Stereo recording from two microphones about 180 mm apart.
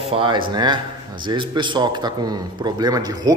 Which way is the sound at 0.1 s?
25° right (ahead or behind).